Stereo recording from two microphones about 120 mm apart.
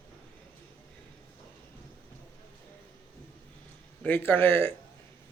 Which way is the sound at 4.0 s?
15° left (ahead or behind).